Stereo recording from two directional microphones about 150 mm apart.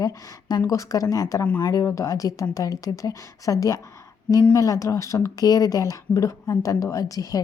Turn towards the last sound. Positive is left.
turn(degrees=25)  # may be behind; listen again after turning